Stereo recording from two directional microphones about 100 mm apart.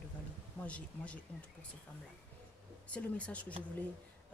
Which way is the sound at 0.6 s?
15° left (ahead or behind).